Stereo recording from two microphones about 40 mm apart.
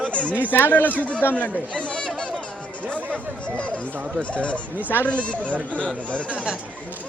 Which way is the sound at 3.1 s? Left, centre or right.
Left.